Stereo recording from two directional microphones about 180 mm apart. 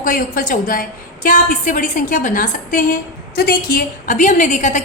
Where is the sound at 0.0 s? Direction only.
50° left (ahead or behind).